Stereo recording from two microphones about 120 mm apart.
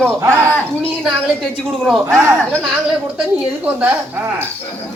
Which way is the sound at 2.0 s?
20° right (ahead or behind).